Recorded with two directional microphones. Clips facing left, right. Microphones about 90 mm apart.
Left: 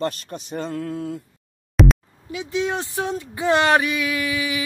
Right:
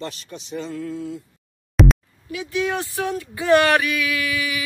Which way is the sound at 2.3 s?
25° left (ahead or behind).